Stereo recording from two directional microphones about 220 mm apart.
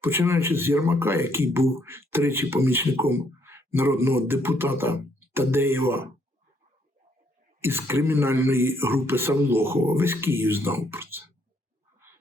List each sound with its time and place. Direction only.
0.0 s speech: 10° right (ahead or behind)
7.6 s speech: 10° right (ahead or behind)